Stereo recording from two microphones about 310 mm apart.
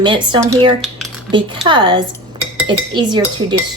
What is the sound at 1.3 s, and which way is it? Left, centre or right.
A woman's voice, centre.